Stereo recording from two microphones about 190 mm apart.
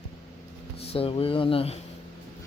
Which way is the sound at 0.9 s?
30° left (ahead or behind).